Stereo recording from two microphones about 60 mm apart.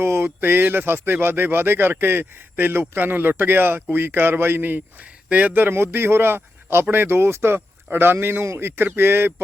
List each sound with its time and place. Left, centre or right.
0.0 s a man's voice: right